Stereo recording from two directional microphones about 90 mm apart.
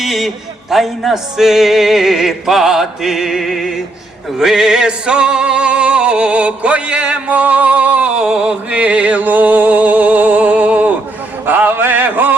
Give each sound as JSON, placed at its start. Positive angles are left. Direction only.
{"t": 0.0, "sound": "a man's voice", "side_deg": 0}
{"t": 0.7, "sound": "music", "side_deg": 0}